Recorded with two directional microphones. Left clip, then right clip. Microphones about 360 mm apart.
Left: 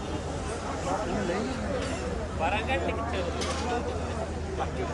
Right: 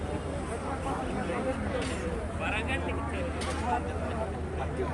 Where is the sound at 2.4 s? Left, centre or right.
Left.